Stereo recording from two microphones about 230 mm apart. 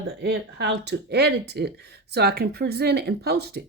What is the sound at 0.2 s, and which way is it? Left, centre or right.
Speech, right.